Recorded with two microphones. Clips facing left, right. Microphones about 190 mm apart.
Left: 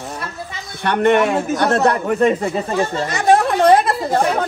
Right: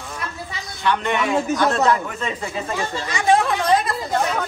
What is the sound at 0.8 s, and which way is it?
Speech, 55° left (ahead or behind).